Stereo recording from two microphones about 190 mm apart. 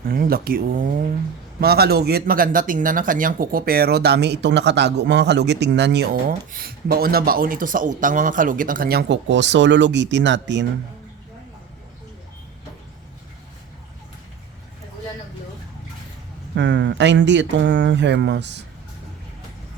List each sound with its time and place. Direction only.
0.1 s speech: 50° right (ahead or behind); by 10.7 s 70° right (ahead or behind)
16.6 s speech: 70° right (ahead or behind)